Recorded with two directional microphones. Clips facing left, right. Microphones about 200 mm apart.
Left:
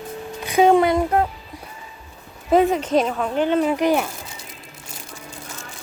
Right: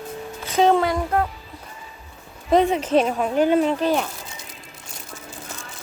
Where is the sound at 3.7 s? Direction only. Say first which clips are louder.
Left 2 dB; 10° left (ahead or behind).